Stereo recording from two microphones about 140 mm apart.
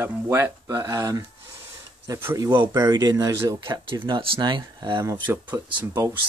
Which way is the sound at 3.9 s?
35° right (ahead or behind).